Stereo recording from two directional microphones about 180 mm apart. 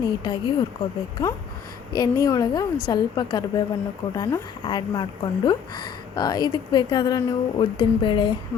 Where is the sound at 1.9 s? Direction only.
20° left (ahead or behind).